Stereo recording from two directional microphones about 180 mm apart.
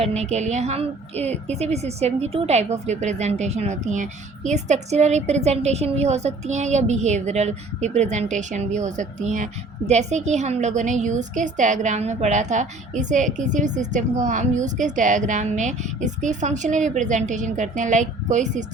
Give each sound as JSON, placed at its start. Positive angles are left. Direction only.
{"t": 0.0, "sound": "a woman's voice", "side_deg": -40}